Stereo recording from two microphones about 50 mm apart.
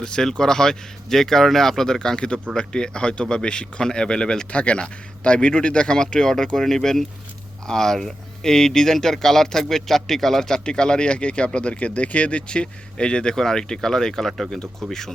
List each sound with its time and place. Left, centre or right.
0.0 s speech: centre